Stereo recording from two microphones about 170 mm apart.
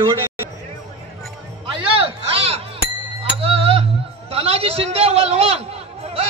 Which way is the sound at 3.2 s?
35° right (ahead or behind).